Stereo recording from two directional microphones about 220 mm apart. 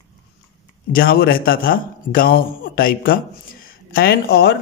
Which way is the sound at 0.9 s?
45° left (ahead or behind).